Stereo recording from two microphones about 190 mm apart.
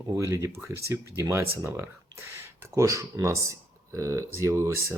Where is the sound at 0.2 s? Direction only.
15° right (ahead or behind).